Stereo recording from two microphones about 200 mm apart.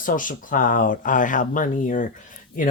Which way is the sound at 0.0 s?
45° left (ahead or behind).